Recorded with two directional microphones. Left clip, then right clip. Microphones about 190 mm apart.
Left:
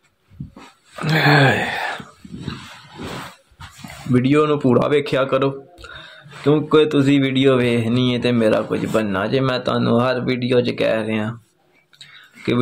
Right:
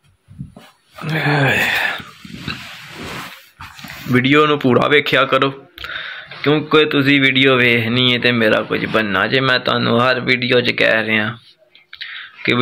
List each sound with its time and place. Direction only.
1.0 s dog: 20° left (ahead or behind)
4.1 s speech: centre (ahead or behind)
6.4 s a man's voice: 15° left (ahead or behind)
11.9 s clicking: 5° left (ahead or behind)